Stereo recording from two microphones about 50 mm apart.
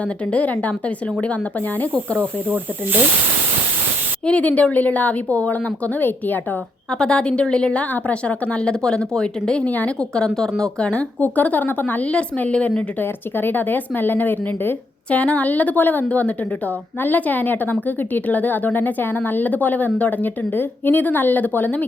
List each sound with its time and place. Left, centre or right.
0.0 s a woman's voice: left
4.3 s a woman's voice: left
7.0 s speech: centre
11.2 s a woman's voice: left
13.0 s a woman's voice: left
15.1 s a woman's voice: left